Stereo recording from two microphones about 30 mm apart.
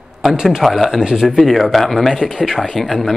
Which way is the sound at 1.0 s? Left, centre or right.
Centre.